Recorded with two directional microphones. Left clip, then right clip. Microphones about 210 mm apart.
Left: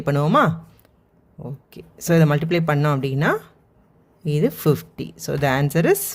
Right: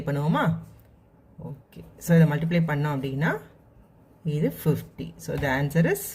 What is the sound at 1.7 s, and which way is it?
Speech, 50° left (ahead or behind).